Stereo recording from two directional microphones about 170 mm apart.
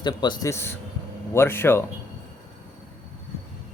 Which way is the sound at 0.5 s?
15° left (ahead or behind).